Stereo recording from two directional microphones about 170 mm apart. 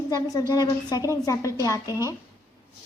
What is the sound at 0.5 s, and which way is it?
A woman's voice, 25° left (ahead or behind).